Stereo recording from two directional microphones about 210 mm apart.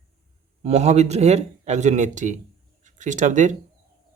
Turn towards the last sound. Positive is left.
turn(degrees=-35)  # may be behind; listen again after turning